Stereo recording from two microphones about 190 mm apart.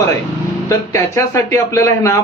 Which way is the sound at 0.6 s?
15° left (ahead or behind).